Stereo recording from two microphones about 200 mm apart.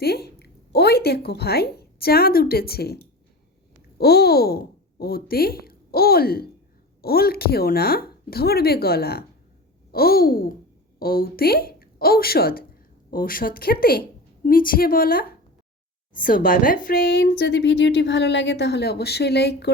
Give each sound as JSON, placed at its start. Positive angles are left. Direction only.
{"t": 0.0, "sound": "a woman's voice", "side_deg": 50}